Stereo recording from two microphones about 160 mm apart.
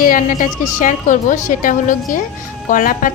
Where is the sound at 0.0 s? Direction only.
55° left (ahead or behind).